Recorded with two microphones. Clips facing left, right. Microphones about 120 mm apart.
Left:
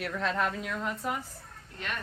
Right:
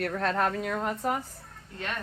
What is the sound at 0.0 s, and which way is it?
Speech, 45° right (ahead or behind).